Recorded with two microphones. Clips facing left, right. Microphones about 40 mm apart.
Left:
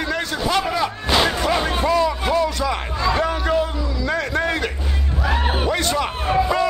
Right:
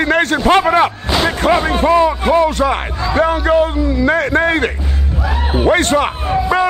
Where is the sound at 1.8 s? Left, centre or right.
Right.